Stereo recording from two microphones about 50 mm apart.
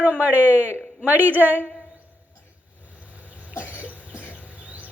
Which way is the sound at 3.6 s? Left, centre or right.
Left.